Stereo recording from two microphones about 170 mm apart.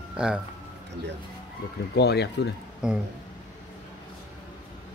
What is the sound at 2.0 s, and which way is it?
Speech, 75° left (ahead or behind).